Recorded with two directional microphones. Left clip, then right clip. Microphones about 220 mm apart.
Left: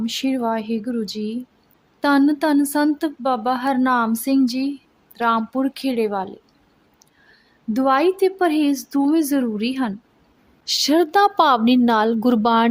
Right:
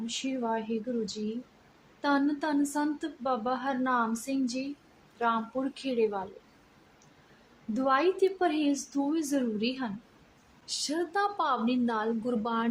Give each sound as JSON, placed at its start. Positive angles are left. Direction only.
{"t": 0.0, "sound": "speech", "side_deg": 45}
{"t": 2.0, "sound": "speech", "side_deg": 45}
{"t": 7.7, "sound": "a woman's voice", "side_deg": 45}